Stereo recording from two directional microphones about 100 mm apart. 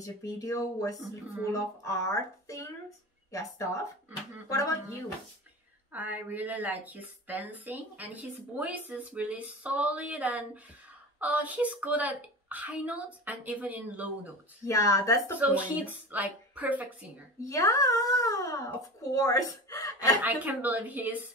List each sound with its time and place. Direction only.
0.0 s a child's voice: 35° left (ahead or behind)
5.9 s speech: 15° right (ahead or behind)
14.7 s a child's voice: 35° left (ahead or behind)
15.3 s speech: 15° right (ahead or behind)
17.4 s a child's voice: 35° left (ahead or behind)
20.2 s speech: 15° right (ahead or behind)